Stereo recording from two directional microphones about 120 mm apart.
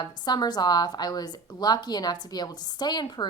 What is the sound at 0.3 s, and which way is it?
A woman's voice, 35° left (ahead or behind).